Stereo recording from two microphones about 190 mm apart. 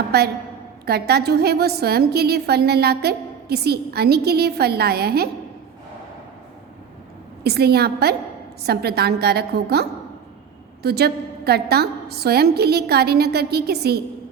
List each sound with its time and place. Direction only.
0.1 s a woman's voice: 55° right (ahead or behind)
7.4 s a woman's voice: 55° right (ahead or behind)
10.8 s a woman's voice: 55° right (ahead or behind)